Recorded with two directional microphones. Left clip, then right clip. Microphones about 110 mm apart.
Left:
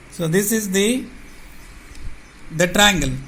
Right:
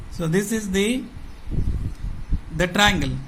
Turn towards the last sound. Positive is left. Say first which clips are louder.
# left 3 dB
turn(degrees=35)  # may be behind; listen again after turning